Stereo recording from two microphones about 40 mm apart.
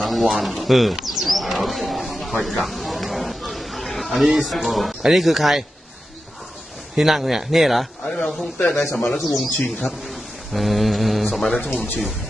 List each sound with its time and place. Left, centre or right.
0.0 s a sound: centre
5.1 s a man's voice: centre
7.0 s a man's voice: centre
8.0 s a man's voice: centre
11.5 s speech: left